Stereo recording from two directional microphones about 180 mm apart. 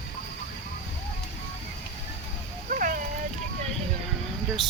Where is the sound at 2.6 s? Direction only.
50° right (ahead or behind).